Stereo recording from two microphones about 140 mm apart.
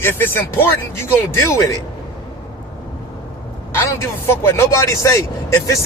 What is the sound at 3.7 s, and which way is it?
Speech, 20° left (ahead or behind).